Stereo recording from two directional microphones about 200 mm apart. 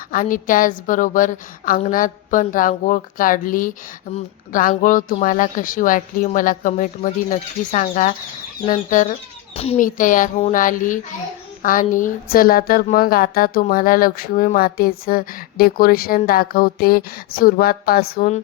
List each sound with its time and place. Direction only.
0.1 s a woman's voice: 45° left (ahead or behind)
18.2 s speech: 35° left (ahead or behind)